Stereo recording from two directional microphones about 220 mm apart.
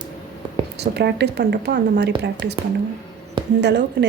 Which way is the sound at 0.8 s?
50° right (ahead or behind).